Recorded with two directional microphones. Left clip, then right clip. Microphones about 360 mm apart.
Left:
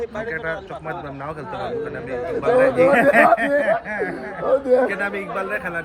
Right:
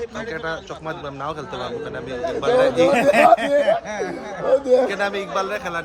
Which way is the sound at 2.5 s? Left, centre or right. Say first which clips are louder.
Left 2 dB; centre.